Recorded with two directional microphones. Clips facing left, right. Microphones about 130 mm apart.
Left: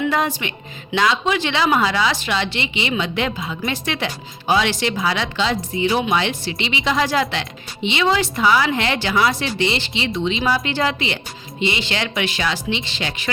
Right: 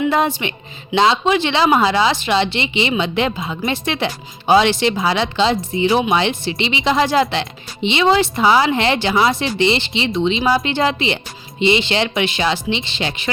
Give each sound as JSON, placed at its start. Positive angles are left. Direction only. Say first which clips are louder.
{"t": 0.1, "sound": "speech", "louder": "right 3 dB", "side_deg": -25}